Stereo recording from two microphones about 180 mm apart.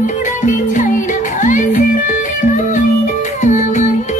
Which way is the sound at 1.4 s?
45° left (ahead or behind).